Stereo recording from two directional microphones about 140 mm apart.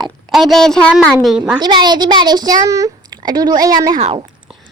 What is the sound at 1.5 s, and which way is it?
A woman's voice, 30° right (ahead or behind).